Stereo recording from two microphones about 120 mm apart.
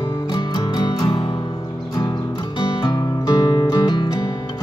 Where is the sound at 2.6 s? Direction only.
35° left (ahead or behind).